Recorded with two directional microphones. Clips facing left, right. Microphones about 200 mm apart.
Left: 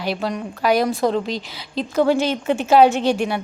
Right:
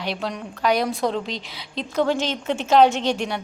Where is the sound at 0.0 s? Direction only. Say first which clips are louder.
Left 4 dB; 5° left (ahead or behind).